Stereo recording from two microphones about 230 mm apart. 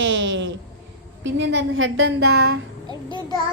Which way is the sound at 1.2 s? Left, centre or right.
Right.